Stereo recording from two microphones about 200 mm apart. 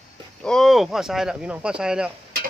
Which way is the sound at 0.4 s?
Centre (ahead or behind).